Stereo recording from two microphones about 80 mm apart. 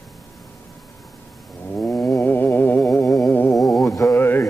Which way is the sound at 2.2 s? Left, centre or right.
Left.